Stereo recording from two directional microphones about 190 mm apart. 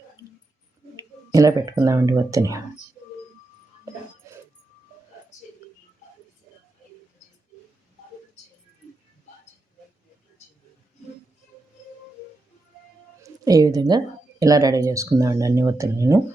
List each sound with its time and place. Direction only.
0.9 s a sound: 15° right (ahead or behind)
1.8 s speech: 15° right (ahead or behind)
13.2 s speech: 20° right (ahead or behind)